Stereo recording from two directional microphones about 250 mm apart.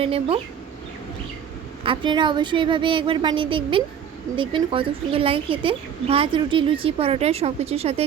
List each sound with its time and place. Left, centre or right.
0.0 s a woman's voice: right
1.8 s a woman's voice: centre